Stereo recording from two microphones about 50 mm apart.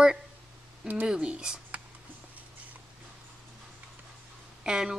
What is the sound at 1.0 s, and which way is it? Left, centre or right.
Speech, centre.